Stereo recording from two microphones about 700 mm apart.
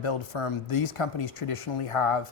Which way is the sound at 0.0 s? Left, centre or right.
Left.